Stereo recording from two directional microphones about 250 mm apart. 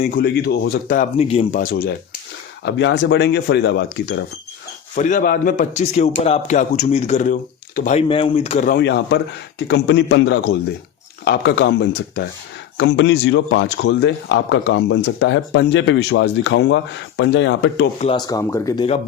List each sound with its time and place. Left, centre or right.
0.0 s a man's voice: left
4.9 s a man's voice: left
8.8 s a man's voice: left
18.0 s speech: centre